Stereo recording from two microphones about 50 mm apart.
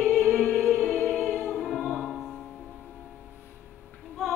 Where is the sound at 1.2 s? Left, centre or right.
Centre.